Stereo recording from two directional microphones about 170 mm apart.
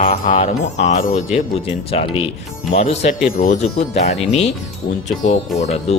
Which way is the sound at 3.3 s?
50° left (ahead or behind).